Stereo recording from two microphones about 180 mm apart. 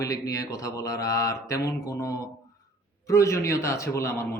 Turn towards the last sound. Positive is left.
turn(degrees=15)  # may be behind; listen again after turning